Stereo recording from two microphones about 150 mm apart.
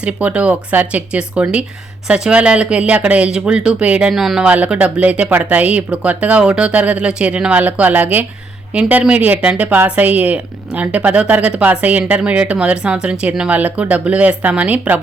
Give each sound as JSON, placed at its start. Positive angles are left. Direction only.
{"t": 0.0, "sound": "speech", "side_deg": -10}